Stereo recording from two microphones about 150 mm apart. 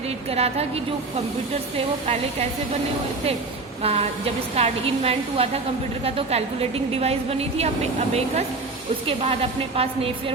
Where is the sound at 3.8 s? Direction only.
40° right (ahead or behind).